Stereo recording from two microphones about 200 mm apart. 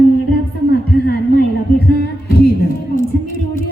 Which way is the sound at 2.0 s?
50° left (ahead or behind).